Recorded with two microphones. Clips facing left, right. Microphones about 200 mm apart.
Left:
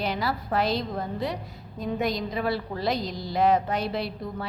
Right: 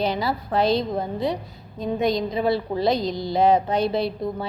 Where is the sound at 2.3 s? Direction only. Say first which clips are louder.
Right 6 dB; 25° right (ahead or behind).